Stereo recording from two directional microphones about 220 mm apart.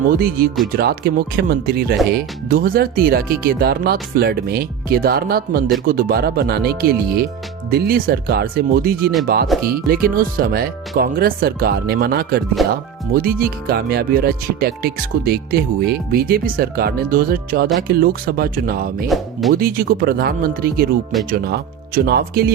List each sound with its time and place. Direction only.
0.2 s speech: 40° right (ahead or behind)
12.6 s speech: centre (ahead or behind)
13.2 s speech: 40° right (ahead or behind)
19.0 s speech: centre (ahead or behind)
19.5 s speech: 40° right (ahead or behind)